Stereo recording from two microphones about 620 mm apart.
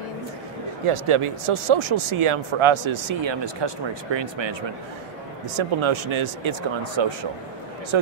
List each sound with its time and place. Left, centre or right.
0.8 s speech: right